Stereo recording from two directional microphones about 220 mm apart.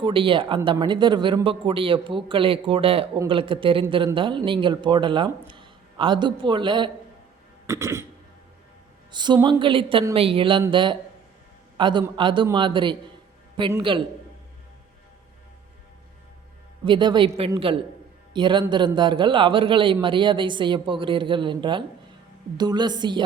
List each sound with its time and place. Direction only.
0.0 s a man's voice: 25° right (ahead or behind)
7.7 s throat clearing: 10° right (ahead or behind)
9.1 s a man's voice: 20° right (ahead or behind)
16.8 s a man's voice: 20° right (ahead or behind)